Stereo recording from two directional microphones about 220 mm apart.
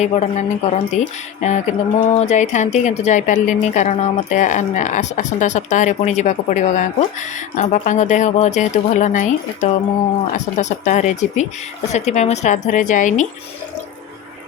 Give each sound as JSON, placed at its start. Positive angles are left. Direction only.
{"t": 0.0, "sound": "speech", "side_deg": 30}